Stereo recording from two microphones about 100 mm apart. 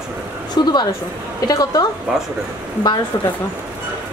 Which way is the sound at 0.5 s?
45° left (ahead or behind).